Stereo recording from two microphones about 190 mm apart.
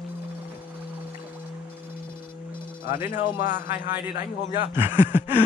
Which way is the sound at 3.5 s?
10° right (ahead or behind).